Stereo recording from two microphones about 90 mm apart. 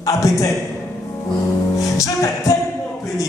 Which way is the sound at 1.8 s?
40° left (ahead or behind).